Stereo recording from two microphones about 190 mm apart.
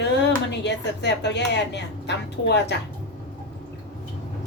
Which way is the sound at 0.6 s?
65° left (ahead or behind).